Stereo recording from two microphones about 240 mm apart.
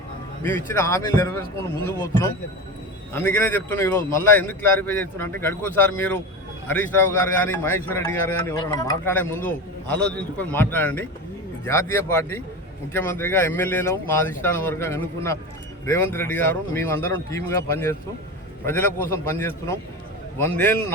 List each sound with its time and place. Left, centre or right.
0.4 s a man's voice: centre